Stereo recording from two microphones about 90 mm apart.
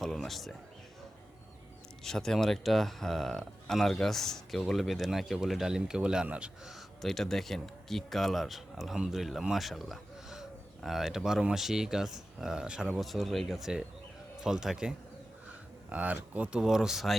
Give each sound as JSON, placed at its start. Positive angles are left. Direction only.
{"t": 0.0, "sound": "a sound", "side_deg": 5}
{"t": 2.0, "sound": "speech", "side_deg": 5}
{"t": 6.7, "sound": "speech", "side_deg": 5}
{"t": 13.0, "sound": "speech", "side_deg": 0}